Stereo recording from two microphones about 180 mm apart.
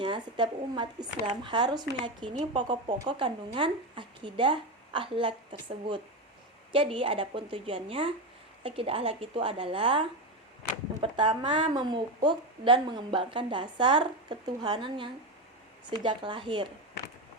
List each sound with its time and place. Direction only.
0.0 s a woman's voice: 25° right (ahead or behind)